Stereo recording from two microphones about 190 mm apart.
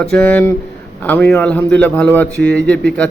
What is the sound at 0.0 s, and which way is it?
A man's voice, 5° left (ahead or behind).